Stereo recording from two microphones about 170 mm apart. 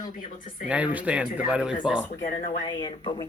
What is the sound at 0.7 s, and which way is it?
Speech, 10° right (ahead or behind).